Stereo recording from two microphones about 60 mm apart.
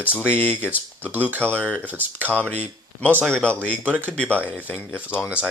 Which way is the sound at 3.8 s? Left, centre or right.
Right.